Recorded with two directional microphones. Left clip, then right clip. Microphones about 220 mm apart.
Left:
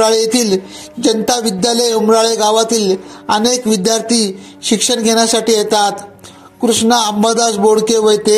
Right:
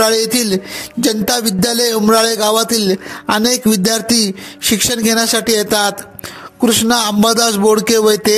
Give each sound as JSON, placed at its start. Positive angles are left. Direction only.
{"t": 0.0, "sound": "music", "side_deg": -35}